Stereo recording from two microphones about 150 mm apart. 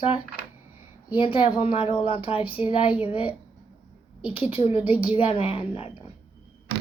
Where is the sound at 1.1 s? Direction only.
35° left (ahead or behind).